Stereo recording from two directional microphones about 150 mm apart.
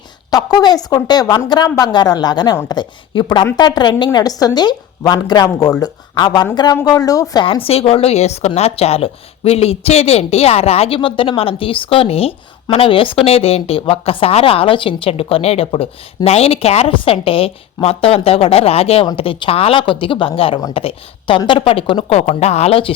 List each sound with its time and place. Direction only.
0.3 s a woman's voice: 25° left (ahead or behind)
7.4 s a woman's voice: 40° left (ahead or behind)
22.3 s speech: 45° left (ahead or behind)